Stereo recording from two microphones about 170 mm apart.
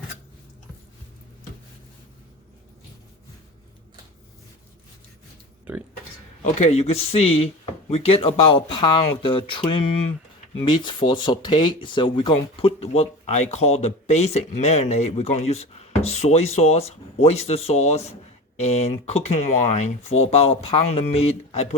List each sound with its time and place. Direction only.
6.4 s speech: 40° left (ahead or behind)